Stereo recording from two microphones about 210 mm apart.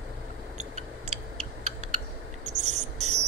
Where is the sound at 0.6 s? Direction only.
30° right (ahead or behind).